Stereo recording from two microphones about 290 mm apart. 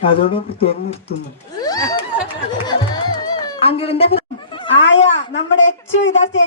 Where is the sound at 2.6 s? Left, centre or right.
Centre.